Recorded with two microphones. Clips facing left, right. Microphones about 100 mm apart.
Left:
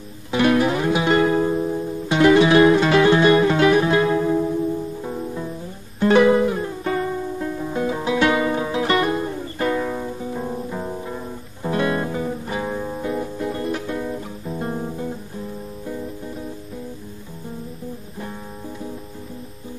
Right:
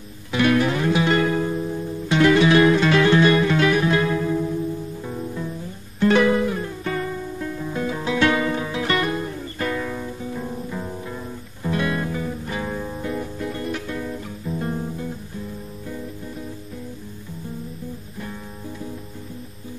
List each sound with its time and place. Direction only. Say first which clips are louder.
0.3 s music: left 2 dB; 25° left (ahead or behind)